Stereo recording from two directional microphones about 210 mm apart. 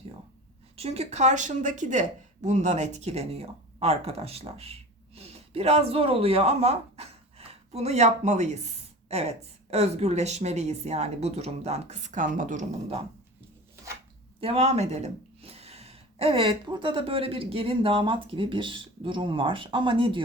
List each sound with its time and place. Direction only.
0.8 s speech: 30° right (ahead or behind)
14.4 s speech: 30° right (ahead or behind)